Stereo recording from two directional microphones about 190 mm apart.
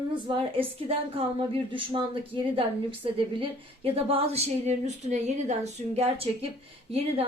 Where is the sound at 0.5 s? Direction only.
30° right (ahead or behind).